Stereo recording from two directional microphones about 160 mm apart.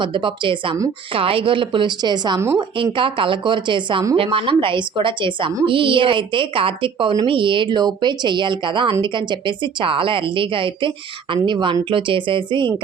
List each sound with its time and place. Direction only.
0.0 s a woman's voice: 30° right (ahead or behind)